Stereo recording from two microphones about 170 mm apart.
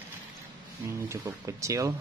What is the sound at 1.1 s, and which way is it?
Speech, 20° right (ahead or behind).